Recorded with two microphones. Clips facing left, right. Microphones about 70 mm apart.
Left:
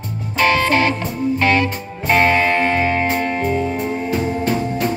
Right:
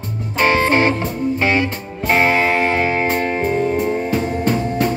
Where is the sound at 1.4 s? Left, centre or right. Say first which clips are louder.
Left 2 dB; centre.